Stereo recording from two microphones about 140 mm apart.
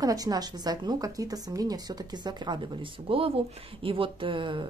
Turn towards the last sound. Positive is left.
turn(degrees=-40)  # may be behind; listen again after turning